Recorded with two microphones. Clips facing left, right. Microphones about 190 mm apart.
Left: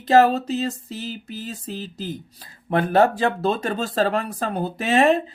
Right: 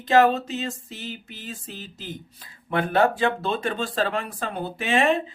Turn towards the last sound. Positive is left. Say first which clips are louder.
# left 4 dB
turn(degrees=40)  # may be behind; listen again after turning